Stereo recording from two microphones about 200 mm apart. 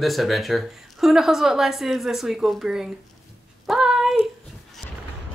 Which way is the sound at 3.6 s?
5° right (ahead or behind).